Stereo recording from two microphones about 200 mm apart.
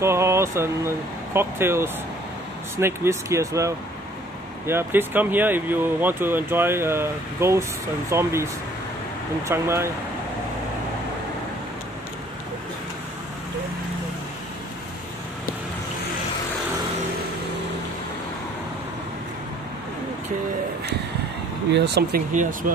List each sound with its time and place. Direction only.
0.0 s speech: 15° right (ahead or behind)
9.5 s speech: 10° right (ahead or behind)
21.7 s speech: 55° right (ahead or behind)
22.3 s speech: 40° right (ahead or behind)